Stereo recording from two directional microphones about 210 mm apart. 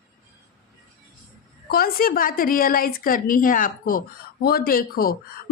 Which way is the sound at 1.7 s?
45° left (ahead or behind).